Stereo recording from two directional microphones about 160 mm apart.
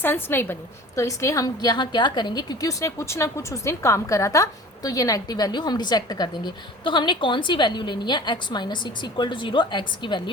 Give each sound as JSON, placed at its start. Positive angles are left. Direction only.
{"t": 0.0, "sound": "a woman's voice", "side_deg": 15}